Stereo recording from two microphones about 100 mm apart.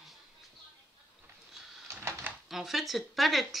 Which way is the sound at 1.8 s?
25° right (ahead or behind).